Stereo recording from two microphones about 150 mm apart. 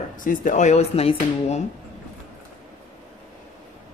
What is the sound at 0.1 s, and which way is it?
Speech, 60° left (ahead or behind).